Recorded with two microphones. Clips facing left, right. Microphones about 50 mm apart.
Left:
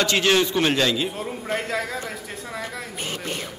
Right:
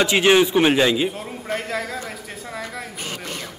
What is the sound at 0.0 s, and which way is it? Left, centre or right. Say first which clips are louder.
A man's voice: right 4 dB; centre.